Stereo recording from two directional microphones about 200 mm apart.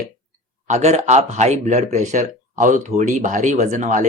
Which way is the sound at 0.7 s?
35° right (ahead or behind).